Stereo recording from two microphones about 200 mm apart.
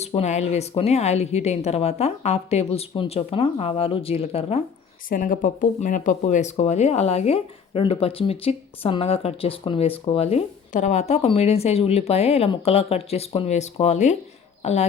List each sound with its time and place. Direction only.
0.0 s speech: 30° left (ahead or behind)
5.0 s speech: 45° left (ahead or behind)